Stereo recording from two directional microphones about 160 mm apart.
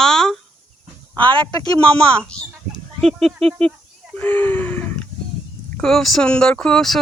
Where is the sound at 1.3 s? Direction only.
35° right (ahead or behind).